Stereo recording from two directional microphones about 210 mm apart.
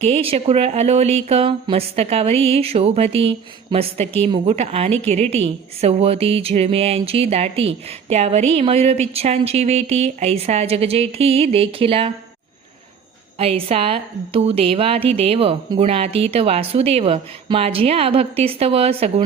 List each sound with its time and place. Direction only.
0.0 s a woman's voice: 30° right (ahead or behind)
4.0 s a woman's voice: 10° left (ahead or behind)
4.3 s a woman's voice: 30° right (ahead or behind)
13.4 s a woman's voice: 30° right (ahead or behind)